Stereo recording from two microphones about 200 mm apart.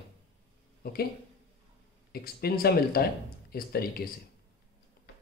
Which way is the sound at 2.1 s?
50° left (ahead or behind).